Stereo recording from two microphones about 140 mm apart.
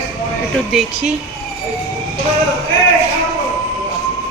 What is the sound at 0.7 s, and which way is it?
Speech, 5° right (ahead or behind).